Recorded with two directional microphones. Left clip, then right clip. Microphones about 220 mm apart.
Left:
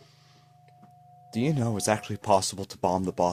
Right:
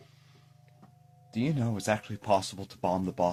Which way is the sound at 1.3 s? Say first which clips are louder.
Left 4 dB; 40° left (ahead or behind).